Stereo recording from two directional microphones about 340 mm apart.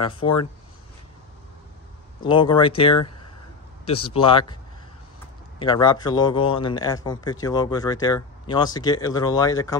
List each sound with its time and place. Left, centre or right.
0.0 s speech: centre
2.2 s speech: centre
5.6 s speech: centre